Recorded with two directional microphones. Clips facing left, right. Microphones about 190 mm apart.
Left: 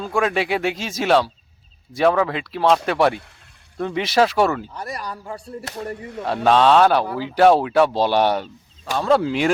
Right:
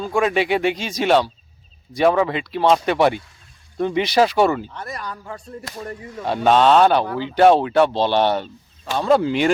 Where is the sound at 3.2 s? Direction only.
65° left (ahead or behind).